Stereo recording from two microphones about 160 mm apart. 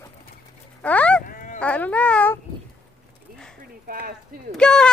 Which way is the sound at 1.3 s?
60° left (ahead or behind).